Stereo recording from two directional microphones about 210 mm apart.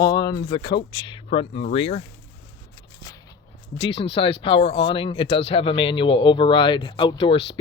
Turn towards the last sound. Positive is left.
turn(degrees=25)  # may be behind; listen again after turning